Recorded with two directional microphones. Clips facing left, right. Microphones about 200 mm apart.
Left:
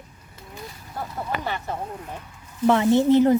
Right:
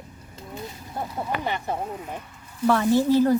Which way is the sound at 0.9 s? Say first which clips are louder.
Right 1 dB; 15° right (ahead or behind).